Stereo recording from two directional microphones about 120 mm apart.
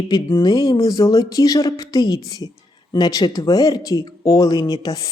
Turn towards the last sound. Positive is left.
turn(degrees=35)  # may be behind; listen again after turning